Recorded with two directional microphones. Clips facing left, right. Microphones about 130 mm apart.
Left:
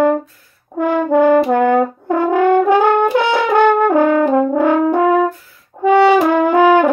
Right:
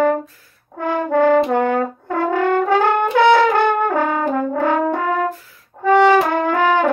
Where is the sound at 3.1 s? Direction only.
15° left (ahead or behind).